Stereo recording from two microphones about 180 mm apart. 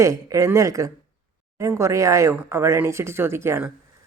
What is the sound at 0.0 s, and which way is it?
Speech, 20° right (ahead or behind).